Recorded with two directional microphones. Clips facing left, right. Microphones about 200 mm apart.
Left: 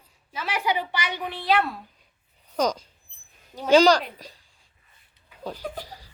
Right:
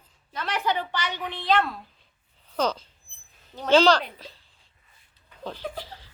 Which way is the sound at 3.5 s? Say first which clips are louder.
Left 2 dB; 10° left (ahead or behind).